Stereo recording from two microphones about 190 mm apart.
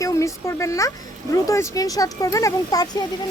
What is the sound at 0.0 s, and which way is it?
Speech, 15° left (ahead or behind).